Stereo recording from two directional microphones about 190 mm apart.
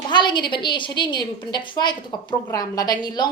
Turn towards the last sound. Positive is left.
turn(degrees=20)  # may be behind; listen again after turning